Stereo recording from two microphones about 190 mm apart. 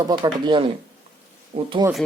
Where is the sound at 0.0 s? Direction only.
20° right (ahead or behind).